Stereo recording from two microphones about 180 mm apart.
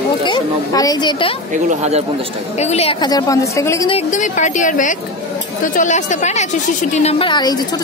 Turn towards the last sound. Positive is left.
turn(degrees=25)  # may be behind; listen again after turning